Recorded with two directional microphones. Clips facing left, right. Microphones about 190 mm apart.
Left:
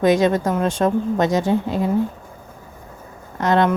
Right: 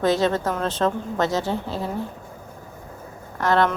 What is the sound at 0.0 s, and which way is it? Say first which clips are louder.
A woman's voice: left 4 dB; 15° left (ahead or behind).